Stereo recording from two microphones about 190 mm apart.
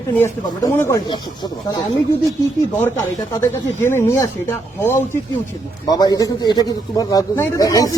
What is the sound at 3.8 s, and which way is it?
Speech, 15° left (ahead or behind).